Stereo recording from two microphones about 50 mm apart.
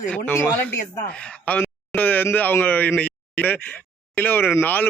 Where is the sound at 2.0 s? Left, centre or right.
Left.